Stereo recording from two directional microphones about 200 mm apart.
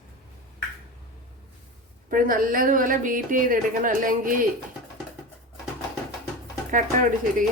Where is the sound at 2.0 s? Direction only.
45° right (ahead or behind).